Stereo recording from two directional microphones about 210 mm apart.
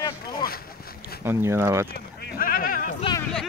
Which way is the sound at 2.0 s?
45° left (ahead or behind).